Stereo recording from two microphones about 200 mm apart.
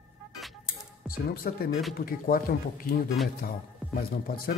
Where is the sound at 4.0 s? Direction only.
45° left (ahead or behind).